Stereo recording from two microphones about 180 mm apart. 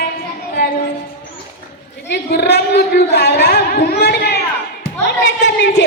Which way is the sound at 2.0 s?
65° left (ahead or behind).